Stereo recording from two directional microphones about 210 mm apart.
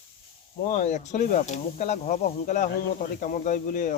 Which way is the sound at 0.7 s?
35° left (ahead or behind).